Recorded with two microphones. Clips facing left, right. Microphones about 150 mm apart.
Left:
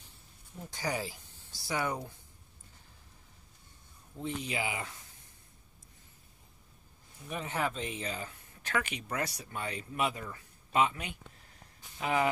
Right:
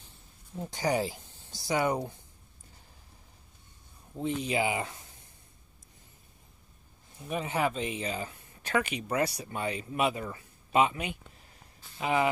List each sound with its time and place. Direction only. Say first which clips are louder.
0.6 s speech: right 7 dB; 20° right (ahead or behind)
4.2 s speech: right 6 dB; 25° right (ahead or behind)
7.2 s speech: right 5 dB; 15° right (ahead or behind)